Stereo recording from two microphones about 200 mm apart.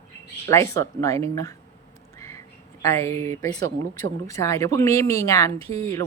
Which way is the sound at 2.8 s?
15° left (ahead or behind).